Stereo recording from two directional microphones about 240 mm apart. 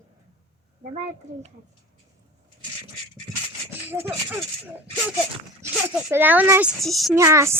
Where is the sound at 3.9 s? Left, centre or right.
Centre.